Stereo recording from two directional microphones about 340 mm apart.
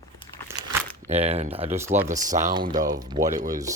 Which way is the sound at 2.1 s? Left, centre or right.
Right.